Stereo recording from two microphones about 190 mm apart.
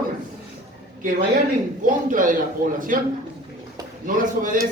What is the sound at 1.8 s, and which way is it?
Speech, 45° right (ahead or behind).